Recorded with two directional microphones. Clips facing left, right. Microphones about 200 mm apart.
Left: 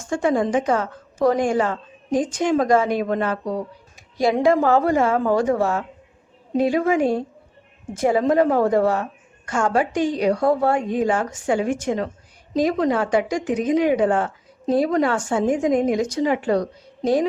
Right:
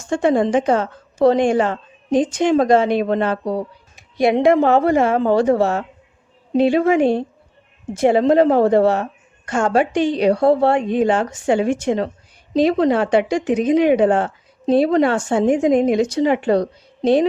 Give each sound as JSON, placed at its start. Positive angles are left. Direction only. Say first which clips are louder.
{"t": 0.1, "sound": "a woman's voice", "louder": "right 4 dB", "side_deg": -25}